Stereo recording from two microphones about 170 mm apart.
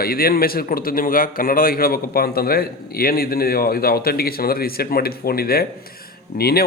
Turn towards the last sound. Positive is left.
turn(degrees=65)  # may be behind; listen again after turning